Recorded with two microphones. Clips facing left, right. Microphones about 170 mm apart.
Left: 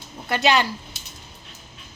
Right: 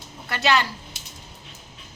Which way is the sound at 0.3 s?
15° left (ahead or behind).